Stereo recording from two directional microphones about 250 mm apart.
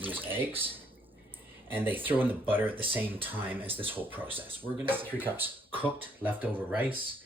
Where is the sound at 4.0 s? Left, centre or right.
Centre.